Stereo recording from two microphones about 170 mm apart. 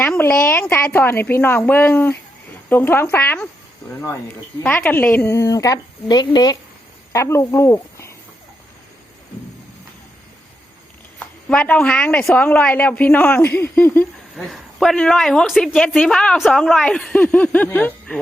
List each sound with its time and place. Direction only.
0.0 s a sound: 10° left (ahead or behind)
0.7 s a woman's voice: 10° left (ahead or behind)
4.6 s a woman's voice: 10° left (ahead or behind)
11.2 s a woman's voice: 10° left (ahead or behind)
14.3 s a woman's voice: centre (ahead or behind)